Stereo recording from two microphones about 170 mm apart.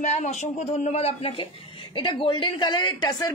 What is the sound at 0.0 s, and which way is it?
A woman's voice, 45° left (ahead or behind).